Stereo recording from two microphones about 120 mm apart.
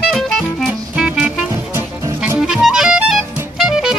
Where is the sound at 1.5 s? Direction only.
25° right (ahead or behind).